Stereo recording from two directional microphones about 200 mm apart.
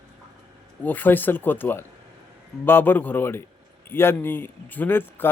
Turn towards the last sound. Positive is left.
turn(degrees=10)  # may be behind; listen again after turning